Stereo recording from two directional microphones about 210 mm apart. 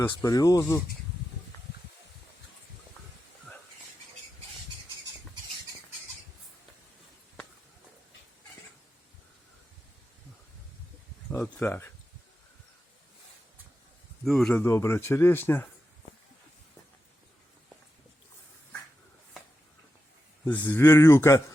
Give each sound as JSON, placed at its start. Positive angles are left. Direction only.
{"t": 0.2, "sound": "speech", "side_deg": 15}
{"t": 11.3, "sound": "speech", "side_deg": 10}
{"t": 14.3, "sound": "speech", "side_deg": 5}
{"t": 20.6, "sound": "speech", "side_deg": 10}